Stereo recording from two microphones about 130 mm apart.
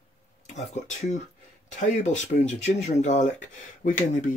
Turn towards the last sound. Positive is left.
turn(degrees=75)  # may be behind; listen again after turning